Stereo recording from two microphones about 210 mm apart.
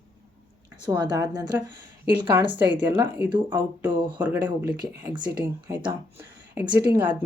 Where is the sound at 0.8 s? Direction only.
20° right (ahead or behind).